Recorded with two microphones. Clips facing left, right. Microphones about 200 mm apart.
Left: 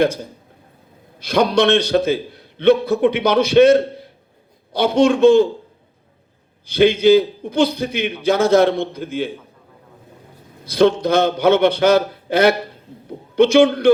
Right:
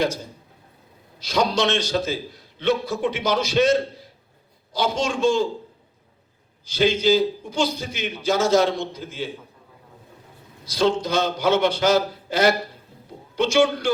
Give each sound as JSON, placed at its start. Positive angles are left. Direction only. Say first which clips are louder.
{"t": 1.2, "sound": "a man's voice", "louder": "left 6 dB", "side_deg": 55}
{"t": 6.7, "sound": "a man's voice", "louder": "left 7 dB", "side_deg": 60}
{"t": 10.7, "sound": "a man's voice", "louder": "left 7 dB", "side_deg": 60}